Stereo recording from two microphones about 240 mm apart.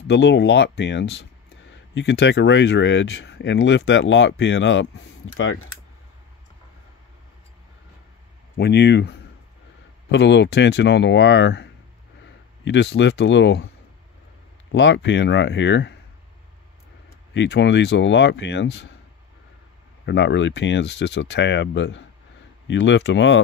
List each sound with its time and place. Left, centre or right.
0.1 s speech: left
8.5 s speech: left
14.7 s speech: left
17.3 s speech: left
20.1 s speech: left